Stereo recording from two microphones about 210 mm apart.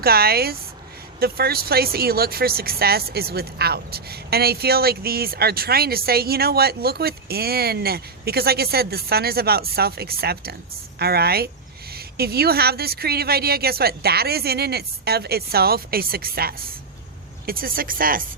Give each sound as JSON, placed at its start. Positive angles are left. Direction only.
{"t": 0.0, "sound": "speech", "side_deg": -45}